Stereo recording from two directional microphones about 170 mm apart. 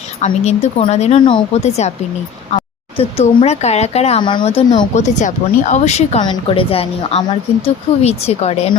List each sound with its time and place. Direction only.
0.3 s a woman's voice: 35° left (ahead or behind)
1.2 s speech: 25° left (ahead or behind)
1.6 s a woman's voice: 40° left (ahead or behind)
3.0 s a woman's voice: 35° left (ahead or behind)
4.2 s speech: 25° left (ahead or behind)
4.9 s a woman's voice: 45° left (ahead or behind)
6.2 s a woman's voice: 30° left (ahead or behind)